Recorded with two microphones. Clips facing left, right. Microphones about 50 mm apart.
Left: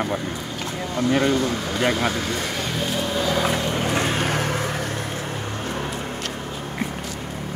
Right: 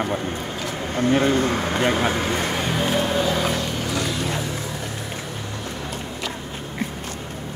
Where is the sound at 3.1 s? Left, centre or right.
Centre.